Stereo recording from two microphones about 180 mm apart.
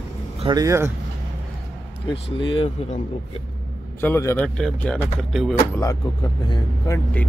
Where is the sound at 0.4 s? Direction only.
20° right (ahead or behind).